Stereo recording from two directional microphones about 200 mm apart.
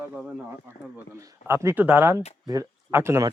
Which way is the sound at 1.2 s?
15° right (ahead or behind).